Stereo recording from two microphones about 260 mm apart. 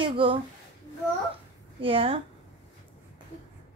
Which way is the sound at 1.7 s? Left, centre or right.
Right.